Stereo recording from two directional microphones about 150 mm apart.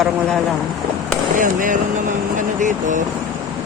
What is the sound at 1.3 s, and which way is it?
Speech, 60° right (ahead or behind).